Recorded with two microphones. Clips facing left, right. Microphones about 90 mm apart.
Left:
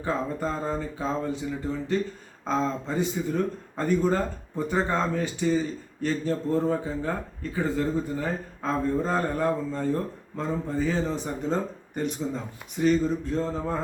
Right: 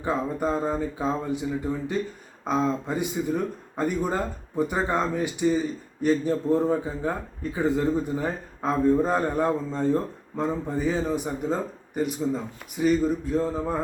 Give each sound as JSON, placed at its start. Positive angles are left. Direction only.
{"t": 0.0, "sound": "speech", "side_deg": -15}